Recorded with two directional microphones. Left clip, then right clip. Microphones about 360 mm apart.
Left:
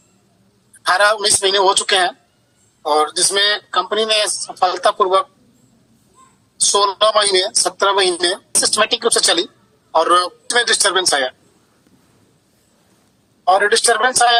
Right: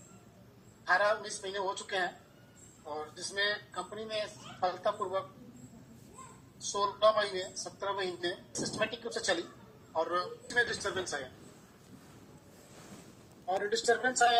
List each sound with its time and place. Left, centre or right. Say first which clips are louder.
0.9 s speech: left 15 dB; left
6.7 s speech: left 14 dB; left
13.5 s a man's voice: left 17 dB; left